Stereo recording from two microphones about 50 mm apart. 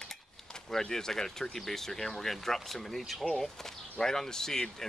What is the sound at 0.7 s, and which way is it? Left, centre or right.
Speech, centre.